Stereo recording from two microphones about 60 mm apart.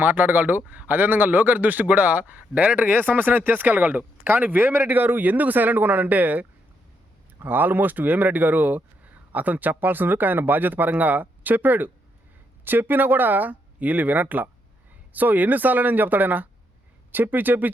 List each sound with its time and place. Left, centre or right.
0.0 s a man's voice: right